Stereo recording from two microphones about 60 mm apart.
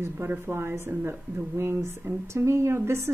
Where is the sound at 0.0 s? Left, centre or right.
Right.